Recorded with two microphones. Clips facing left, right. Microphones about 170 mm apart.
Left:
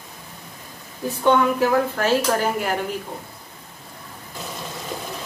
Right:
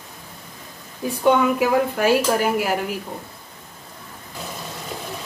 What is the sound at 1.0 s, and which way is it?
A woman's voice, 10° right (ahead or behind).